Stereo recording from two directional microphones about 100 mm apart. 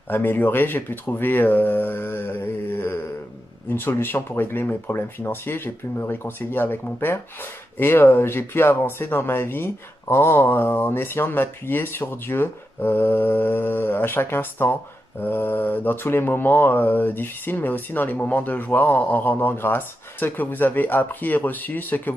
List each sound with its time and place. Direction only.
0.1 s speech: 20° left (ahead or behind)